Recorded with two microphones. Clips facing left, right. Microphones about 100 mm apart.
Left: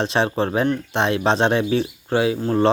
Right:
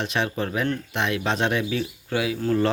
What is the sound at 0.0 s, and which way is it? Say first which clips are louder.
Speech: left 6 dB; 30° left (ahead or behind).